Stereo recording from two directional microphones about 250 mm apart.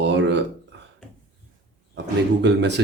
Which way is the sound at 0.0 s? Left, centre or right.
Right.